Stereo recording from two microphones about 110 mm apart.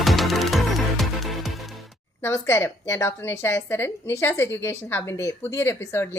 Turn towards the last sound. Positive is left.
turn(degrees=20)  # may be behind; listen again after turning